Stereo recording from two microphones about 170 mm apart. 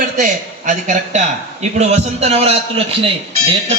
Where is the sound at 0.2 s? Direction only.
45° right (ahead or behind).